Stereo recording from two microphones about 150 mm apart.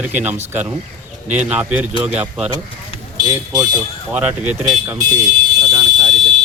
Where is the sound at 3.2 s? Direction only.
25° right (ahead or behind).